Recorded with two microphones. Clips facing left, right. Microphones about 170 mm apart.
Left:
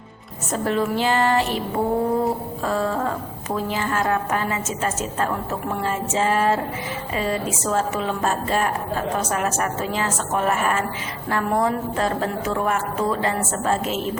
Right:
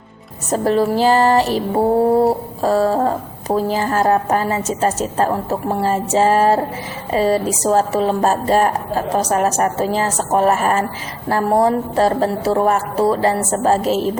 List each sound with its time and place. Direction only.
0.5 s female singing: 35° right (ahead or behind)